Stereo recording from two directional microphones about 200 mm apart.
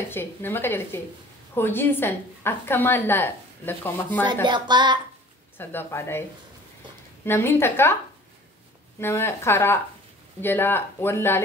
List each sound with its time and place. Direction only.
0.1 s a woman's voice: 10° left (ahead or behind)
4.5 s speech: 20° right (ahead or behind)
5.6 s a woman's voice: 10° left (ahead or behind)
7.2 s a woman's voice: 10° left (ahead or behind)
9.0 s a woman's voice: 10° left (ahead or behind)